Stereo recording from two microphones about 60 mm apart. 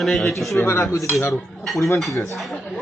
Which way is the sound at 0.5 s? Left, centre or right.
Left.